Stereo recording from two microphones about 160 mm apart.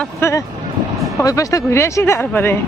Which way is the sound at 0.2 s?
20° left (ahead or behind).